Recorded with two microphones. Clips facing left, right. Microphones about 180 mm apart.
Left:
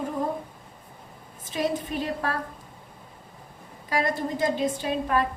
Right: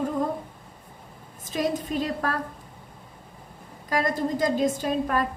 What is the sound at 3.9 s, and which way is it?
A woman's voice, 45° right (ahead or behind).